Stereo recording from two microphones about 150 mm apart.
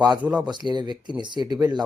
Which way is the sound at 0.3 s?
30° right (ahead or behind).